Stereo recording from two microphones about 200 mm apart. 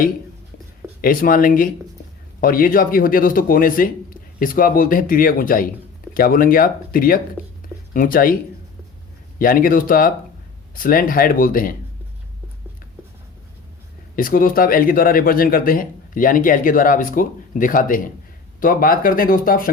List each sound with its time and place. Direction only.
1.0 s speech: 45° left (ahead or behind)
9.4 s speech: 45° left (ahead or behind)
14.2 s speech: 45° left (ahead or behind)